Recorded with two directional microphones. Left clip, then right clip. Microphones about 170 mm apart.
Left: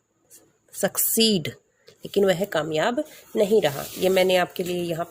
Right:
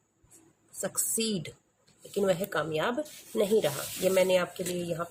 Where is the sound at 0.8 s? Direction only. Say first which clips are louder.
Left 11 dB; 50° left (ahead or behind).